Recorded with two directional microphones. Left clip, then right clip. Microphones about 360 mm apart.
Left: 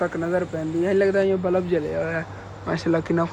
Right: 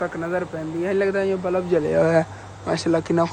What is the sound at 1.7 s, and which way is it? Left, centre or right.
Speech, centre.